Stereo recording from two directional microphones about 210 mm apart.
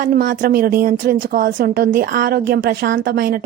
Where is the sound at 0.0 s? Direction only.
45° right (ahead or behind).